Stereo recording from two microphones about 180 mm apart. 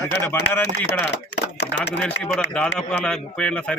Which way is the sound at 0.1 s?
10° left (ahead or behind).